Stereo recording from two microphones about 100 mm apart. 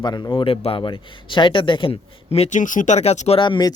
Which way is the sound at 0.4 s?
65° left (ahead or behind).